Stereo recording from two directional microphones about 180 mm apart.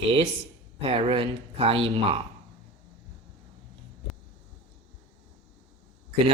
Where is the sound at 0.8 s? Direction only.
30° right (ahead or behind).